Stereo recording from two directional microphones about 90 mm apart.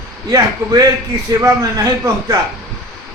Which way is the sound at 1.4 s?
40° right (ahead or behind).